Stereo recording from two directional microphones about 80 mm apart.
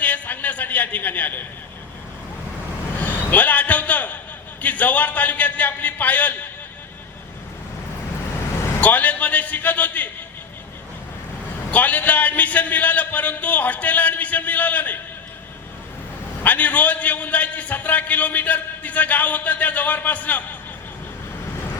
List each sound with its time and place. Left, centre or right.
0.0 s a man's voice: centre
3.0 s a sound: centre
4.6 s a man's voice: centre
8.8 s a man's voice: centre
11.7 s a man's voice: centre
16.4 s a man's voice: centre